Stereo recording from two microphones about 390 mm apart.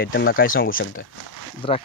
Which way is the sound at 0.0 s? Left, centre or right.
Left.